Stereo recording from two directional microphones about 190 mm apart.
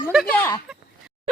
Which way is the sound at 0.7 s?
Centre (ahead or behind).